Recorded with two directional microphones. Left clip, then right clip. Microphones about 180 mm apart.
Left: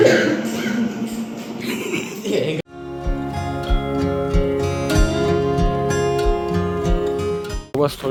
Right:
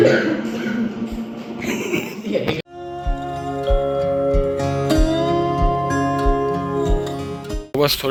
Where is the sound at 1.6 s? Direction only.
40° right (ahead or behind).